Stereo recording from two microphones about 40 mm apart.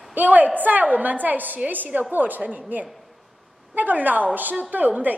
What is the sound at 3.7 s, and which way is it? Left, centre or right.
A woman's voice, right.